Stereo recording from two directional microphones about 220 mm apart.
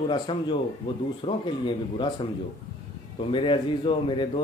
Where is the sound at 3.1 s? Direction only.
20° left (ahead or behind).